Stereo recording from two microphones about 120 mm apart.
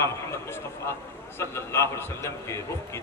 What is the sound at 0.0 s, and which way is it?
A man's voice, 25° left (ahead or behind).